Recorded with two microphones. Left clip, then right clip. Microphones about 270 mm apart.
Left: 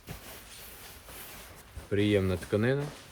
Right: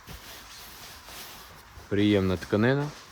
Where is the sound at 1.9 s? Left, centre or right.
Centre.